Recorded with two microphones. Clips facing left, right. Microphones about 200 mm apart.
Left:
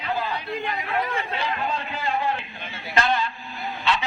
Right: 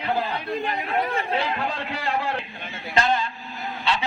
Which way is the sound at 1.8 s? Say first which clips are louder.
Even; 85° right.